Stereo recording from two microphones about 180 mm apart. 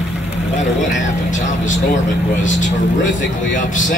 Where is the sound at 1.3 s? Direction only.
45° left (ahead or behind).